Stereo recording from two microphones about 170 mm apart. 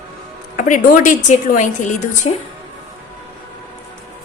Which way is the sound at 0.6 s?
50° left (ahead or behind).